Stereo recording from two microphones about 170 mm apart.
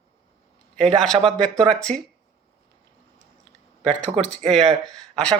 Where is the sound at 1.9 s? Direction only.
40° right (ahead or behind).